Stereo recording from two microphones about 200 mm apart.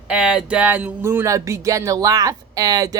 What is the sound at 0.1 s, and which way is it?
Speech, 5° right (ahead or behind).